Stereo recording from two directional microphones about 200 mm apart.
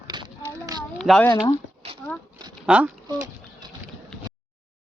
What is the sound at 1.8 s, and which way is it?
Dog, 30° right (ahead or behind).